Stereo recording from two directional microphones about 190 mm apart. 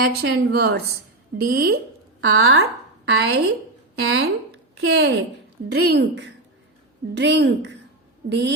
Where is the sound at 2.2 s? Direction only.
90° right.